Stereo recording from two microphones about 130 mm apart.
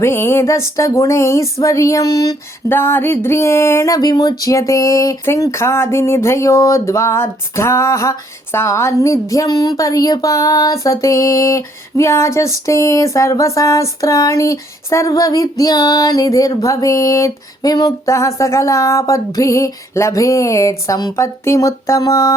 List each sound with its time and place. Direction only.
0.0 s speech: 20° left (ahead or behind)
2.6 s speech: 15° left (ahead or behind)